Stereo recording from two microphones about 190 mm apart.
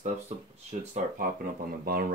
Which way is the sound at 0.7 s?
45° right (ahead or behind).